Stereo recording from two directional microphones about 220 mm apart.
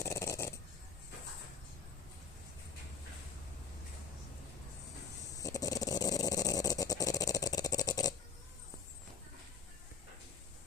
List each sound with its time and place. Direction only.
0.0 s snoring: 15° left (ahead or behind)
5.4 s dog: 15° left (ahead or behind)